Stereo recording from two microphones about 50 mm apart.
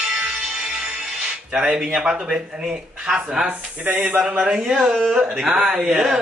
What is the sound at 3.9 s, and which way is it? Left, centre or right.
Speech, right.